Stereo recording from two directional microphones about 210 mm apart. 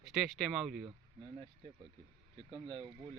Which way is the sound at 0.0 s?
Centre (ahead or behind).